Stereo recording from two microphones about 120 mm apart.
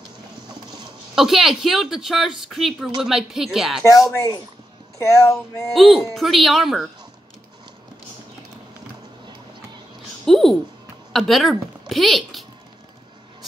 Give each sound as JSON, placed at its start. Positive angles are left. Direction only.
{"t": 1.1, "sound": "speech", "side_deg": -5}
{"t": 4.9, "sound": "speech", "side_deg": 25}
{"t": 5.7, "sound": "speech", "side_deg": 0}
{"t": 10.2, "sound": "a sound", "side_deg": 5}
{"t": 11.1, "sound": "a woman's voice", "side_deg": 0}